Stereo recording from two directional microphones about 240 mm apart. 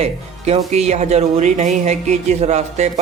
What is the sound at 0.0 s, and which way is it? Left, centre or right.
Speech, right.